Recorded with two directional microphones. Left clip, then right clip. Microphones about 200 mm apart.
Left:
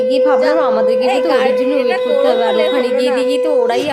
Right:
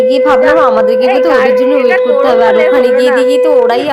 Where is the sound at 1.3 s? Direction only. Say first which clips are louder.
Right 5 dB; 10° left (ahead or behind).